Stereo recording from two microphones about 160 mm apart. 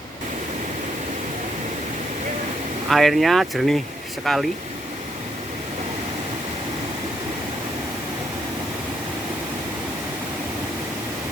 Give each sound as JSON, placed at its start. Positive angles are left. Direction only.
{"t": 2.9, "sound": "speech", "side_deg": 0}